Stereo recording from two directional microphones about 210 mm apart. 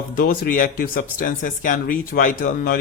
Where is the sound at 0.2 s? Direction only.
40° left (ahead or behind).